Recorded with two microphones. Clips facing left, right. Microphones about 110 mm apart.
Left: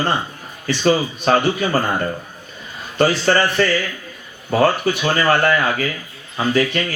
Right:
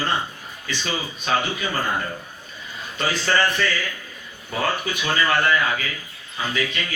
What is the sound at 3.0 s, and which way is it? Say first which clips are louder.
Speech: left 6 dB; 45° left (ahead or behind).